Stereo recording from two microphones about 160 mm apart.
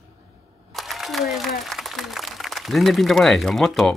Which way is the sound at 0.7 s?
Centre (ahead or behind).